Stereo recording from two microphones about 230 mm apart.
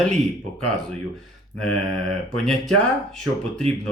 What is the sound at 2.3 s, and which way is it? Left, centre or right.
Speech, centre.